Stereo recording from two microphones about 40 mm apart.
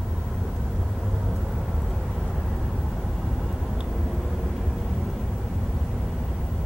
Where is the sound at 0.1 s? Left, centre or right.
Centre.